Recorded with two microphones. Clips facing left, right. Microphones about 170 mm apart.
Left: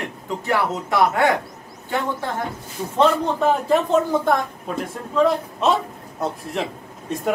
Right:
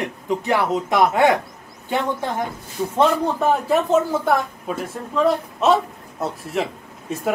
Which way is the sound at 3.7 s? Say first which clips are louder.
Even; 5° right (ahead or behind).